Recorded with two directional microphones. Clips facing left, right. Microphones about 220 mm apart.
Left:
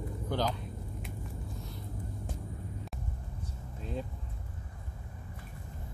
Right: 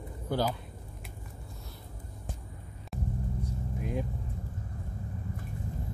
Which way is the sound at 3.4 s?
15° right (ahead or behind).